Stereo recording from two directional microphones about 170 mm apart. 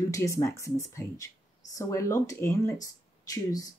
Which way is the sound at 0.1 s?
20° left (ahead or behind).